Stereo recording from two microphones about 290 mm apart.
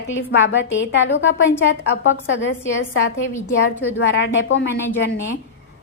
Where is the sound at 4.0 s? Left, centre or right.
Left.